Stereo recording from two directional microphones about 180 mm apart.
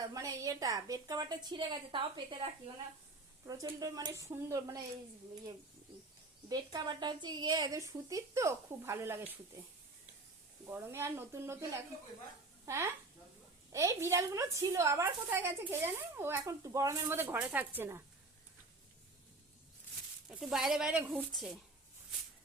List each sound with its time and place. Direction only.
0.1 s speech: 20° right (ahead or behind)
6.5 s speech: 20° right (ahead or behind)
10.7 s a woman's voice: 10° right (ahead or behind)
12.6 s a woman's voice: 15° right (ahead or behind)
20.2 s speech: 5° right (ahead or behind)